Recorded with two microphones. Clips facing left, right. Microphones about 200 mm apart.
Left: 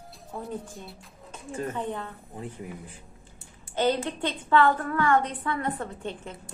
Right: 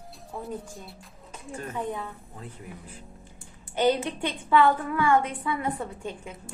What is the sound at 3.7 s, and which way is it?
A woman's voice, 15° right (ahead or behind).